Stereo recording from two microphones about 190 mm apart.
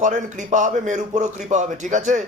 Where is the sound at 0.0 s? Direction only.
40° right (ahead or behind).